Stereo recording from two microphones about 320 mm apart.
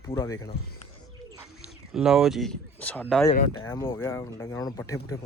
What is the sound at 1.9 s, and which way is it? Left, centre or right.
Speech, centre.